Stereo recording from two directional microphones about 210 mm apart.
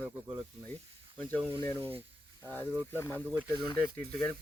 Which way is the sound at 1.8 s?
25° right (ahead or behind).